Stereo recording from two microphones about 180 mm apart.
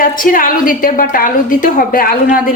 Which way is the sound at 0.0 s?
50° left (ahead or behind).